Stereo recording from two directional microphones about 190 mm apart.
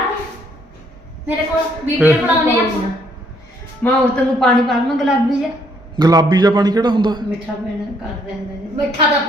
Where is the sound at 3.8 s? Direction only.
5° left (ahead or behind).